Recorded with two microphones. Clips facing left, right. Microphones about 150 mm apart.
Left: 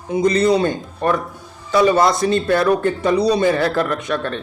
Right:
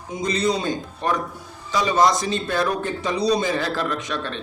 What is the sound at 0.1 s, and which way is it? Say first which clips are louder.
A man's voice: left 8 dB; 60° left (ahead or behind).